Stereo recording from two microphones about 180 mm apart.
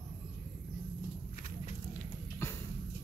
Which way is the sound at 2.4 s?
15° left (ahead or behind).